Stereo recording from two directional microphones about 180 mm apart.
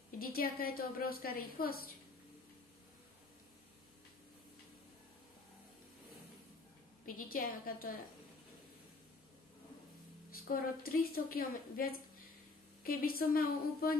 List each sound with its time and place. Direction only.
0.2 s a woman's voice: 55° left (ahead or behind)
7.1 s a woman's voice: 50° left (ahead or behind)
10.3 s a woman's voice: 55° left (ahead or behind)